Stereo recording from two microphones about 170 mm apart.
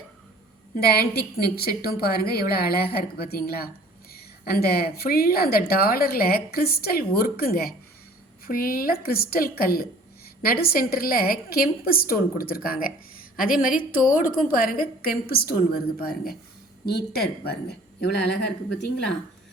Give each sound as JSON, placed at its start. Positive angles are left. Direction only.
{"t": 0.8, "sound": "a woman's voice", "side_deg": 65}